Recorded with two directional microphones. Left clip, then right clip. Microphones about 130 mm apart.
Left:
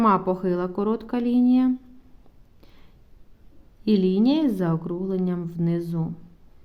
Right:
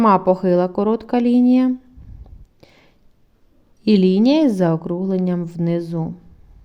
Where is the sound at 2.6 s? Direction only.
35° right (ahead or behind).